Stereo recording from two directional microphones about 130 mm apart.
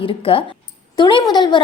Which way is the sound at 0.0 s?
45° left (ahead or behind).